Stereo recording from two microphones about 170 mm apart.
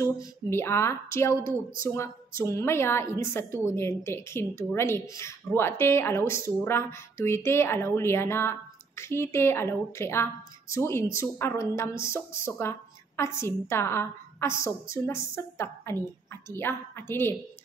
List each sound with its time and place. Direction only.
0.0 s speech: 15° left (ahead or behind)